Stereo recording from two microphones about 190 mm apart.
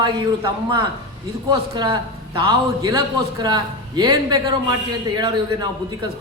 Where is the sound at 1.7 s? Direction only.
25° right (ahead or behind).